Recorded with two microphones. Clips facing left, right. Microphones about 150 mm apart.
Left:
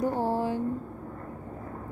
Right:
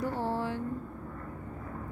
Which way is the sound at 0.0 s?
45° left (ahead or behind).